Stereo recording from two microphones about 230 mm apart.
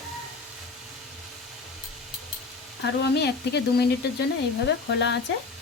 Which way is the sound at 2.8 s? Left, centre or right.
Left.